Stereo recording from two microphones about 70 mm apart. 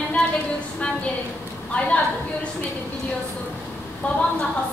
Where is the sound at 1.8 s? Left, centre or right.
Centre.